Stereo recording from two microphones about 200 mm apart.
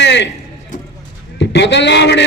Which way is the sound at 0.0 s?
60° left (ahead or behind).